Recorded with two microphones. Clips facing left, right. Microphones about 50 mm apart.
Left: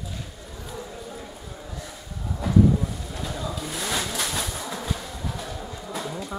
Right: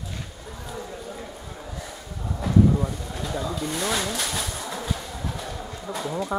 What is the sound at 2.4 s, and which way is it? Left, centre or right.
Vehicle, centre.